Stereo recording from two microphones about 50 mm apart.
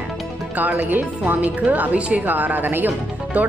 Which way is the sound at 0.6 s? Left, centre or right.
Right.